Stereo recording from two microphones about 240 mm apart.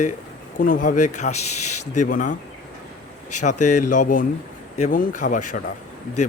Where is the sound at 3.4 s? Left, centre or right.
Left.